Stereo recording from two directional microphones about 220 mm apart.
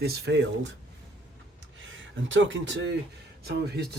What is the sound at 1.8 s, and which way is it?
Speech, 55° right (ahead or behind).